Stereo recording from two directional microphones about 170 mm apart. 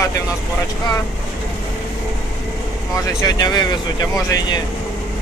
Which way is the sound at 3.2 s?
25° left (ahead or behind).